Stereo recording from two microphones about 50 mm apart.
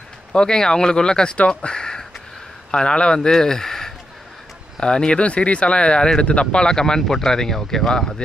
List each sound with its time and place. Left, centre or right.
0.3 s speech: centre